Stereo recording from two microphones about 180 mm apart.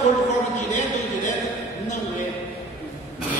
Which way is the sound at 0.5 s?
40° left (ahead or behind).